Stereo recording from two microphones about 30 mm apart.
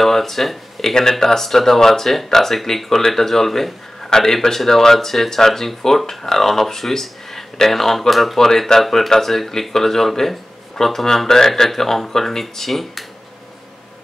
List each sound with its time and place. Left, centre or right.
0.0 s speech: centre
8.4 s speech: centre
8.8 s speech: centre